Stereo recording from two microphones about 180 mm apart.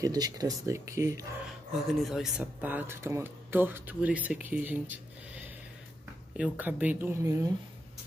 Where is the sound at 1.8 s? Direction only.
Centre (ahead or behind).